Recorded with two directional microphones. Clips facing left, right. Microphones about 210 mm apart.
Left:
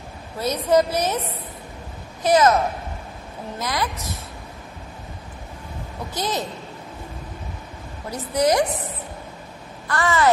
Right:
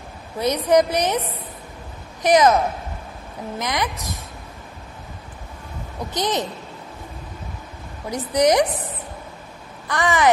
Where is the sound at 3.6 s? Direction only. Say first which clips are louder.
Right 1 dB; 20° right (ahead or behind).